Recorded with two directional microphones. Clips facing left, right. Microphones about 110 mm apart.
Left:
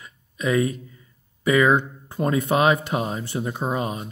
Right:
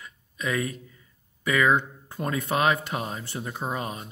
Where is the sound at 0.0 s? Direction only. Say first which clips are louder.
Left 6 dB; 20° left (ahead or behind).